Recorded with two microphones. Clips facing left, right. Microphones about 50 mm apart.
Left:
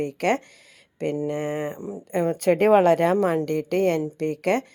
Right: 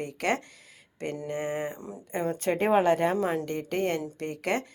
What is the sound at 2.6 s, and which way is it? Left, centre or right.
A woman's voice, left.